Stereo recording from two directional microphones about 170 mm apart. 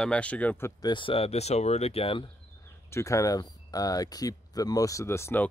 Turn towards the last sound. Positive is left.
turn(degrees=15)  # may be behind; listen again after turning